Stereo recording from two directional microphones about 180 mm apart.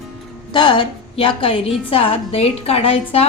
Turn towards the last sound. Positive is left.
turn(degrees=30)  # may be behind; listen again after turning